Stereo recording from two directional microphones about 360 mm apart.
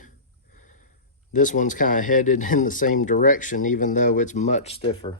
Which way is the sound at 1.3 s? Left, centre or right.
Left.